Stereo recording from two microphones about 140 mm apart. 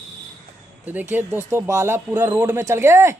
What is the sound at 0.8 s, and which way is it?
Speech, 10° right (ahead or behind).